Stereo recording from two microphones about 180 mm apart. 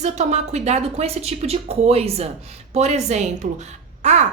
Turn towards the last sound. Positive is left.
turn(degrees=-40)  # may be behind; listen again after turning